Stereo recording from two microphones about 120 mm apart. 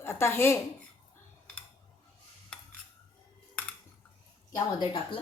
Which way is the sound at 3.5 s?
10° left (ahead or behind).